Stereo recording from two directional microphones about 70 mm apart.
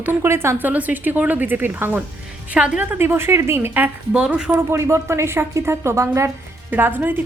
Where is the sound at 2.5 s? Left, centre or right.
Centre.